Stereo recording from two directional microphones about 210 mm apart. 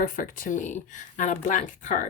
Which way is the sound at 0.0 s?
40° left (ahead or behind).